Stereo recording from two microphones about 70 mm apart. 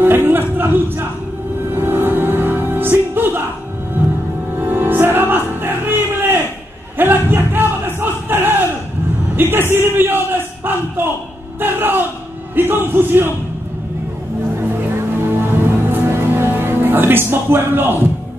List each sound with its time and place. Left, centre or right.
0.0 s a sound: right
1.8 s music: right
4.6 s music: right
7.0 s battle cry: right
9.4 s a sound: right
12.5 s speech: right
15.2 s music: right